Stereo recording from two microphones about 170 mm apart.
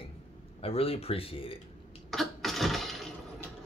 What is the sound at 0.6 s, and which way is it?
Speech, 35° left (ahead or behind).